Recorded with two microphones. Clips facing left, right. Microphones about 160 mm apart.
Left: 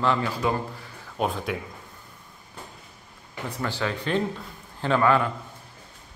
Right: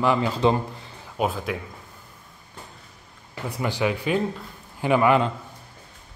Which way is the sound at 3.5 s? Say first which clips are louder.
Right 4 dB; 15° right (ahead or behind).